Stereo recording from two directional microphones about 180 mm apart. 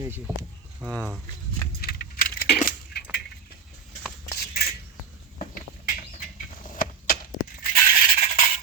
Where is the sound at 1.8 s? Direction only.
60° left (ahead or behind).